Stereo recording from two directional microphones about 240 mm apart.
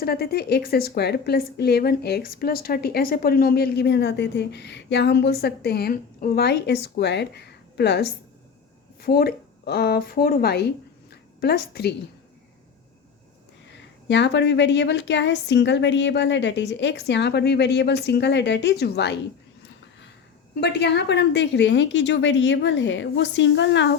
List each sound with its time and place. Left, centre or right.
0.0 s a woman's voice: left
14.1 s a woman's voice: left
20.6 s a woman's voice: left